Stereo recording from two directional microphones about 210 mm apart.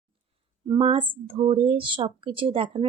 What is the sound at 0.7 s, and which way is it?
Speech, 25° right (ahead or behind).